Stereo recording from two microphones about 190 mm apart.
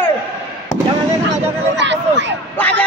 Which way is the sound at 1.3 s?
70° right (ahead or behind).